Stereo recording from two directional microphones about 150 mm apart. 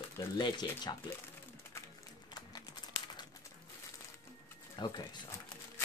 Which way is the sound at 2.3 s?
25° left (ahead or behind).